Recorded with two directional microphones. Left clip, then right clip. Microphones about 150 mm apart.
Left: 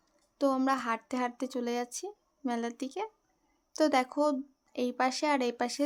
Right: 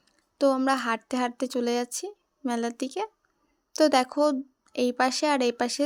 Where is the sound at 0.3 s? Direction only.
25° right (ahead or behind).